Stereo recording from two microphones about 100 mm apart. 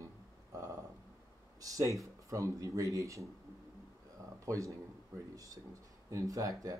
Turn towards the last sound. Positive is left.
turn(degrees=-35)  # may be behind; listen again after turning